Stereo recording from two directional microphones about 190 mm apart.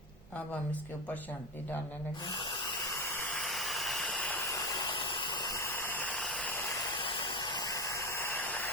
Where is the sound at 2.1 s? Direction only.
20° left (ahead or behind).